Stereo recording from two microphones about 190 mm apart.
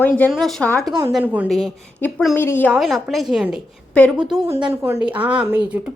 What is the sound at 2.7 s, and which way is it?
A woman's voice, centre (ahead or behind).